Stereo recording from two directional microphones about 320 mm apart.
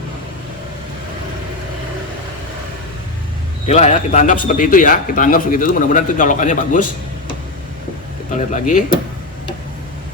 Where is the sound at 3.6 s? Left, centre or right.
Centre.